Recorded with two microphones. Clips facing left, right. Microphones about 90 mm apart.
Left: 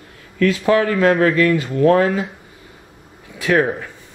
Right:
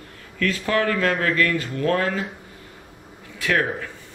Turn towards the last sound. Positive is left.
turn(degrees=20)  # may be behind; listen again after turning